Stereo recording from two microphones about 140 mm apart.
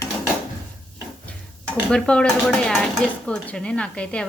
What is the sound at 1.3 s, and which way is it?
Dishes, 5° left (ahead or behind).